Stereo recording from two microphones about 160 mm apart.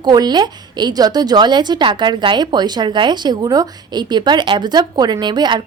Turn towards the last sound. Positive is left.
turn(degrees=-25)  # may be behind; listen again after turning